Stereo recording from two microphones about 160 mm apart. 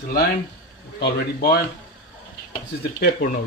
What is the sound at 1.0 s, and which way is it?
Speech, 85° left.